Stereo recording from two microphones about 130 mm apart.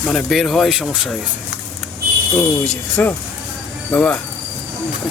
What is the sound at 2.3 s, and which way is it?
Speech, 10° left (ahead or behind).